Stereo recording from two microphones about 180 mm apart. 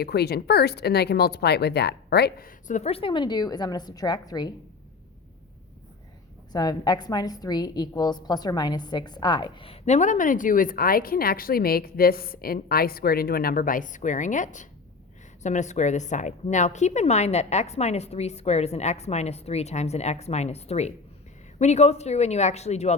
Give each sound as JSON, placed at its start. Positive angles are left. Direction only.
{"t": 0.0, "sound": "speech", "side_deg": 65}
{"t": 6.5, "sound": "a woman's voice", "side_deg": 25}